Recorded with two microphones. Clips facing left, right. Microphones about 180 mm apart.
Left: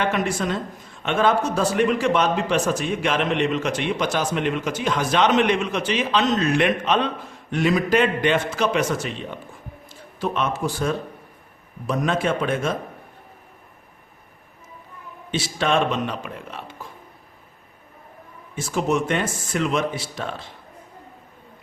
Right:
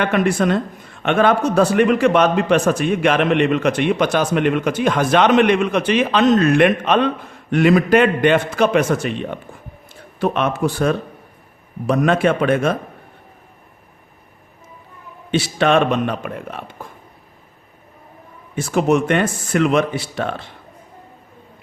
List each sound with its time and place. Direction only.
0.0 s a man's voice: 60° right (ahead or behind)
15.3 s a man's voice: 65° right (ahead or behind)
18.5 s a man's voice: 65° right (ahead or behind)